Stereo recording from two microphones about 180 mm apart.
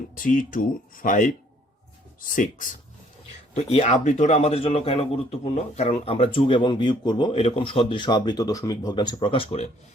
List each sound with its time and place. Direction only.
0.2 s speech: 45° left (ahead or behind)
3.5 s a man's voice: 35° left (ahead or behind)